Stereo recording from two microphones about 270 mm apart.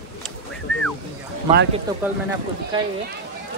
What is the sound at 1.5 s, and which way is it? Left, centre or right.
Speech, right.